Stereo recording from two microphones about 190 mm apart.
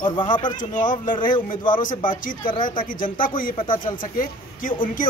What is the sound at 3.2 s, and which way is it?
Speech, 45° left (ahead or behind).